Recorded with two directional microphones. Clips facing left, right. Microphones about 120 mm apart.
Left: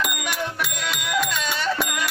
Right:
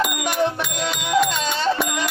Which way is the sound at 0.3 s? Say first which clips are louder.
Right 7 dB; 30° right (ahead or behind).